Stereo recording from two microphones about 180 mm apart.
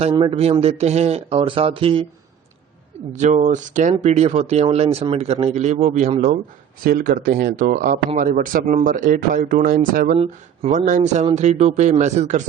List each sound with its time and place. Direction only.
0.0 s speech: 30° right (ahead or behind)
3.1 s speech: 40° right (ahead or behind)
6.8 s speech: 50° right (ahead or behind)
10.2 s speech: 40° right (ahead or behind)